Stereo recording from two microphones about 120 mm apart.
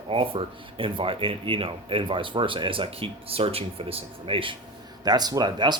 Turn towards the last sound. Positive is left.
turn(degrees=-35)  # may be behind; listen again after turning